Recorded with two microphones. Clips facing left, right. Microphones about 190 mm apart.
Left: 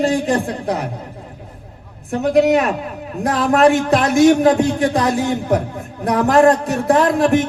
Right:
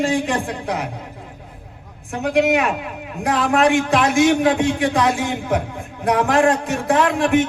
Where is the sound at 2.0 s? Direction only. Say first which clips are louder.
Left 4 dB; 40° left (ahead or behind).